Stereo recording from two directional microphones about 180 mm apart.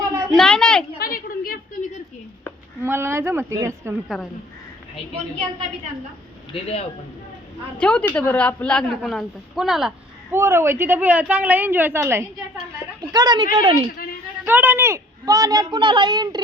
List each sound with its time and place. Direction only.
0.3 s a child's voice: 5° left (ahead or behind)
0.9 s a sound: 55° left (ahead or behind)
2.8 s a woman's voice: 15° right (ahead or behind)
4.1 s a woman's voice: centre (ahead or behind)
6.5 s speech: 35° left (ahead or behind)
7.8 s a woman's voice: 5° left (ahead or behind)
10.3 s a woman's voice: 15° right (ahead or behind)
14.4 s a woman's voice: 10° right (ahead or behind)